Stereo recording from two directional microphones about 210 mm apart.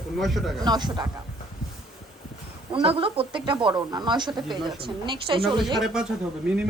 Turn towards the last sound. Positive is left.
turn(degrees=-5)  # may be behind; listen again after turning